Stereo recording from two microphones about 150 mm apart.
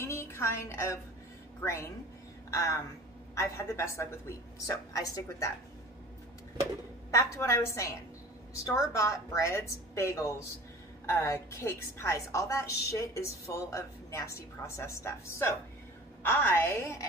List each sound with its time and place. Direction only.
0.0 s music: 15° left (ahead or behind)
1.6 s a woman's voice: 15° left (ahead or behind)
7.1 s a woman's voice: 20° left (ahead or behind)